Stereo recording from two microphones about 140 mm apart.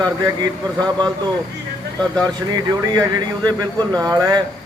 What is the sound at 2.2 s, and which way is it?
Speech, 25° right (ahead or behind).